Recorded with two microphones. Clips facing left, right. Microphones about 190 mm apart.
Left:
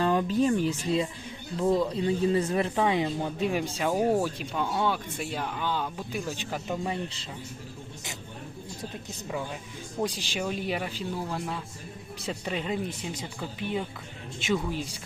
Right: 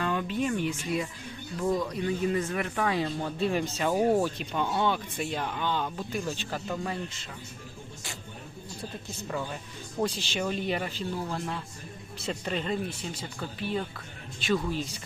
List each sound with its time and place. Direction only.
0.0 s speech: 30° left (ahead or behind); by 7.0 s 15° left (ahead or behind)
9.2 s speech: 5° left (ahead or behind)